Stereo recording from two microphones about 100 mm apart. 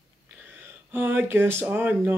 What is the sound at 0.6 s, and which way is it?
Speech, 20° right (ahead or behind).